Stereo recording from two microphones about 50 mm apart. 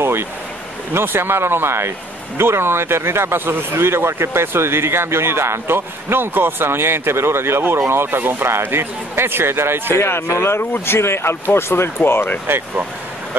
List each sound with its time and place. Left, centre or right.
0.0 s a sound: right
0.9 s a man's voice: right
9.9 s speech: left
12.4 s a man's voice: right